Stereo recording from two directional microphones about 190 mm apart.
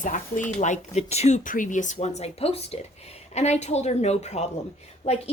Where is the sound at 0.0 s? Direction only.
40° left (ahead or behind).